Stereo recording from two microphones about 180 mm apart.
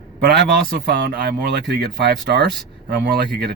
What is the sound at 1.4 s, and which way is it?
Speech, 60° right (ahead or behind).